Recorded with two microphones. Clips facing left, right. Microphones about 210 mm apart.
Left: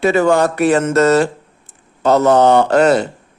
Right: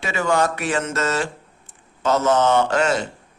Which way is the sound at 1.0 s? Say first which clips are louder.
Left 11 dB; 40° left (ahead or behind).